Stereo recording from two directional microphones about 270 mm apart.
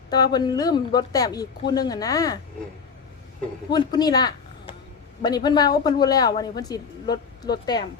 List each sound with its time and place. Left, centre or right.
0.1 s speech: centre
3.7 s speech: centre